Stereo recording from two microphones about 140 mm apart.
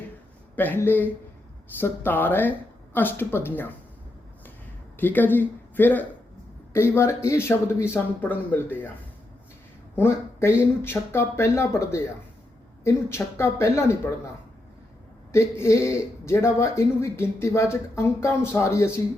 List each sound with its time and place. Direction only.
0.5 s speech: 15° left (ahead or behind)
4.9 s speech: 15° left (ahead or behind)
9.9 s speech: 15° left (ahead or behind)
15.3 s speech: 20° left (ahead or behind)